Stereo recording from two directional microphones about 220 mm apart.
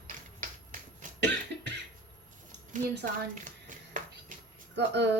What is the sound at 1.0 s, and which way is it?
Cough, 35° right (ahead or behind).